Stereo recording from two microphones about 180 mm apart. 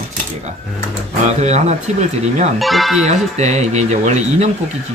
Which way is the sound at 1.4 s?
40° right (ahead or behind).